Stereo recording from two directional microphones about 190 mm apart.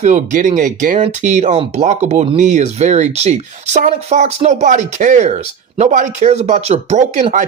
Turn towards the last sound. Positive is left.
turn(degrees=-40)  # may be behind; listen again after turning